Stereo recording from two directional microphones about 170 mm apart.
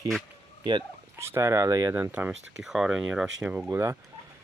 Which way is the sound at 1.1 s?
15° right (ahead or behind).